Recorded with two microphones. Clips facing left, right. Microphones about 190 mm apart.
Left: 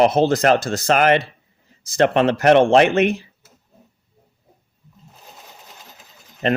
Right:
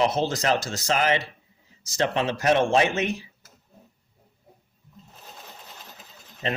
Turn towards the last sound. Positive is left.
turn(degrees=65)  # may be behind; listen again after turning